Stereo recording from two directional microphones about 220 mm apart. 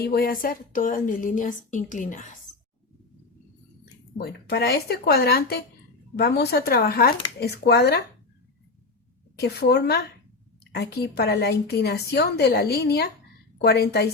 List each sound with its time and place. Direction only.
0.0 s a woman's voice: 45° left (ahead or behind)
4.2 s a woman's voice: 50° left (ahead or behind)
9.3 s a woman's voice: 50° left (ahead or behind)